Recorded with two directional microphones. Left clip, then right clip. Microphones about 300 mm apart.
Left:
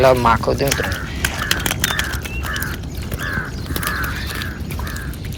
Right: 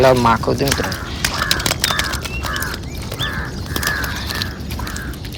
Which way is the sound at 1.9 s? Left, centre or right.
Right.